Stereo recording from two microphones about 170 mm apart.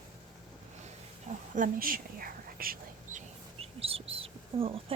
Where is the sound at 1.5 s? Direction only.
55° right (ahead or behind).